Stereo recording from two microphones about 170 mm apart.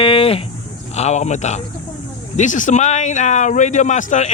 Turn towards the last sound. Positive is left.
turn(degrees=45)  # may be behind; listen again after turning